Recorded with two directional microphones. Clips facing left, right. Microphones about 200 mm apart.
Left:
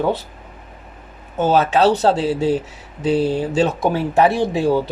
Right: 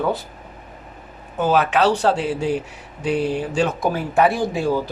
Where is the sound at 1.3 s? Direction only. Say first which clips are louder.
Left 2 dB; 25° left (ahead or behind).